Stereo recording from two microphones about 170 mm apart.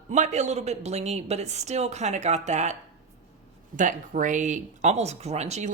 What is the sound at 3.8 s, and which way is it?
Speech, 50° right (ahead or behind).